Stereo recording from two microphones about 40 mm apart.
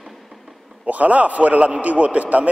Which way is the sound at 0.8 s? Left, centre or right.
Right.